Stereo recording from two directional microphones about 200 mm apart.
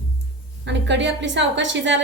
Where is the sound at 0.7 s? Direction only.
60° right (ahead or behind).